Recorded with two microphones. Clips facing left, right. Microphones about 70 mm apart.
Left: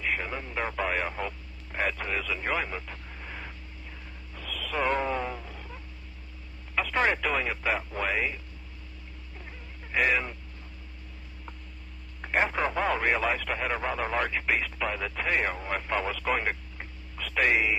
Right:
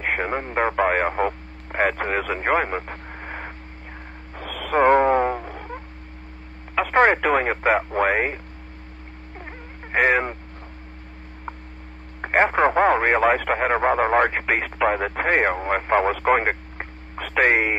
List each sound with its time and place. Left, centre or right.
0.0 s speech: right
4.4 s a sound: right
6.8 s speech: right
9.9 s speech: right
12.2 s speech: right